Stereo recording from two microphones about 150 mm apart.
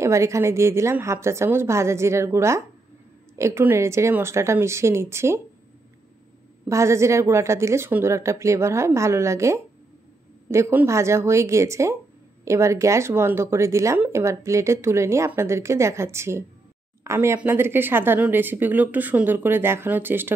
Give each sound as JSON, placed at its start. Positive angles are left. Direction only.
{"t": 0.0, "sound": "speech", "side_deg": -20}
{"t": 6.7, "sound": "speech", "side_deg": -20}